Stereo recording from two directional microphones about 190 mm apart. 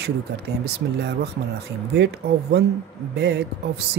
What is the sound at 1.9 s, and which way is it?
Speech, 60° right (ahead or behind).